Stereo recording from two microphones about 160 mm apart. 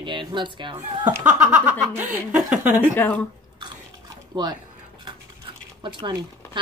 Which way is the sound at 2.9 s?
10° left (ahead or behind).